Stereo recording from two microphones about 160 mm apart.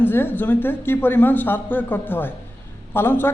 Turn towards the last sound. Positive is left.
turn(degrees=15)  # may be behind; listen again after turning